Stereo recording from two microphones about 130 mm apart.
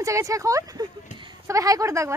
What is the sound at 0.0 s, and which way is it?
Speech, 25° right (ahead or behind).